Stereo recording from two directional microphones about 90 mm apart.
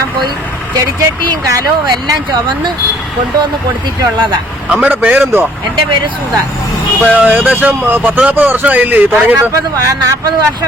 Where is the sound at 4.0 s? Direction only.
55° right (ahead or behind).